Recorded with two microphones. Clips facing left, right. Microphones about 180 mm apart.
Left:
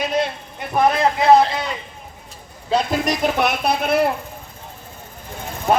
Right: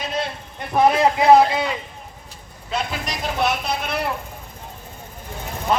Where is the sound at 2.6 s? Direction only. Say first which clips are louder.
Left 7 dB; 35° left (ahead or behind).